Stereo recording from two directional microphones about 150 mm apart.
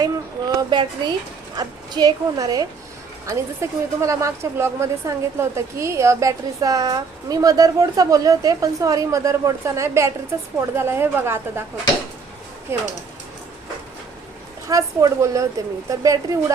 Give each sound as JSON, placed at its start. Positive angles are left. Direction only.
{"t": 0.0, "sound": "a sound", "side_deg": -30}
{"t": 1.5, "sound": "a woman's voice", "side_deg": -25}
{"t": 12.7, "sound": "a woman's voice", "side_deg": -15}
{"t": 14.7, "sound": "a woman's voice", "side_deg": -20}